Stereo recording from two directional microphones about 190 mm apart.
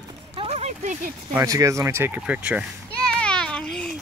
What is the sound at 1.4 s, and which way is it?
Speech, 15° right (ahead or behind).